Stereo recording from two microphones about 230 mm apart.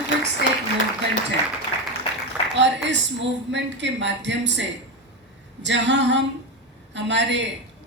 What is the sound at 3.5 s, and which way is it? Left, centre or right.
A woman's voice, right.